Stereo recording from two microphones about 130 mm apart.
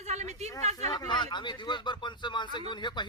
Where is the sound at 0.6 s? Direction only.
60° right (ahead or behind).